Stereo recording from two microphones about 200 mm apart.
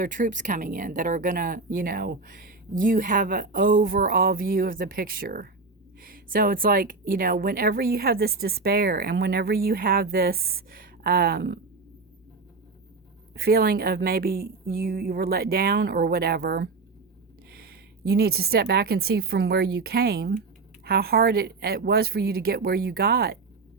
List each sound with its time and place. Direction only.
0.0 s speech: 40° right (ahead or behind)
13.3 s speech: 50° right (ahead or behind)